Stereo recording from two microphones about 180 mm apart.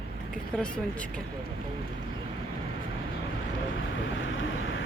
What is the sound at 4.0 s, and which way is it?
Vehicle, 90° left.